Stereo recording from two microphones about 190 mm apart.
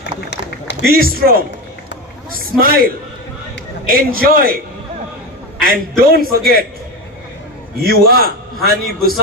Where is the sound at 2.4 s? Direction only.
50° right (ahead or behind).